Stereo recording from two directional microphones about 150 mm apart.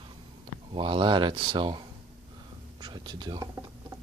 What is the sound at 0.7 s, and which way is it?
Speech, 35° right (ahead or behind).